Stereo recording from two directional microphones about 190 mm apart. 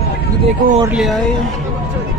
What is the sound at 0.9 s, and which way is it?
Speech, centre (ahead or behind).